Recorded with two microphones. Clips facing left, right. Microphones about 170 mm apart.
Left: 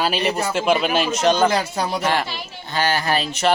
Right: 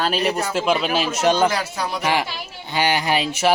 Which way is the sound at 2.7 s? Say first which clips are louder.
Right 1 dB; 15° right (ahead or behind).